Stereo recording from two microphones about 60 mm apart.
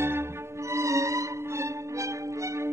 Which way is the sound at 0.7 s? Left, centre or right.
Right.